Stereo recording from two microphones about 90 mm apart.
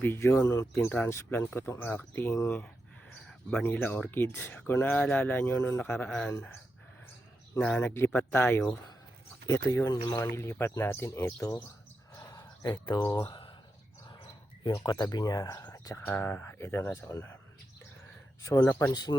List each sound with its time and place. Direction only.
0.0 s speech: 25° left (ahead or behind)
0.4 s speech: 40° left (ahead or behind)
0.8 s speech: 20° left (ahead or behind)
3.2 s a sound: 5° left (ahead or behind)
3.7 s speech: 20° left (ahead or behind)
7.6 s speech: 15° left (ahead or behind)
9.5 s speech: 35° left (ahead or behind)
12.1 s a sound: 45° left (ahead or behind)
13.1 s speech: 65° left (ahead or behind)
14.6 s speech: 50° left (ahead or behind)
16.0 s speech: 25° left (ahead or behind)
18.4 s speech: 35° left (ahead or behind)